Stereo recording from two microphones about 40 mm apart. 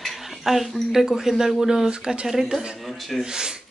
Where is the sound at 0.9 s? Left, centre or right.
Centre.